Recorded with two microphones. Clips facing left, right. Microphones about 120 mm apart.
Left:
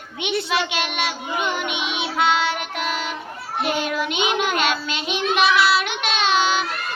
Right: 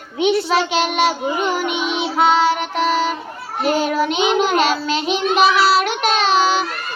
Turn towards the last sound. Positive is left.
turn(degrees=-40)  # may be behind; listen again after turning